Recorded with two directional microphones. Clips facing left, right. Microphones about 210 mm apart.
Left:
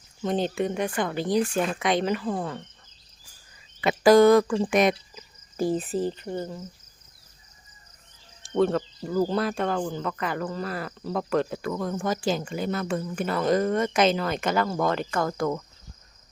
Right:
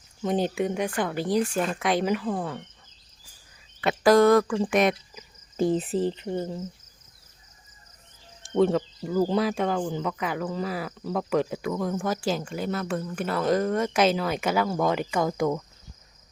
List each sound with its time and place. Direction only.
0.2 s speech: 10° right (ahead or behind)
3.8 s speech: centre (ahead or behind)
5.5 s speech: 20° right (ahead or behind)
8.5 s speech: 15° right (ahead or behind)
9.0 s speech: 5° right (ahead or behind)